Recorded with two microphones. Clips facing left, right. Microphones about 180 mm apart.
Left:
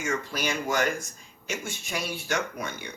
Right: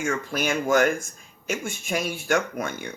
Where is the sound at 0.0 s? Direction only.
50° right (ahead or behind).